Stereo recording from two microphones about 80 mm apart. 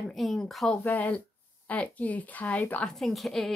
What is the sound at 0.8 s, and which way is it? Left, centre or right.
Speech, left.